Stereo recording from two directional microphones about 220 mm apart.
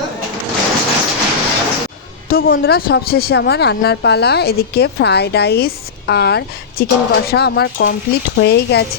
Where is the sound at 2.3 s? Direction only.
45° left (ahead or behind).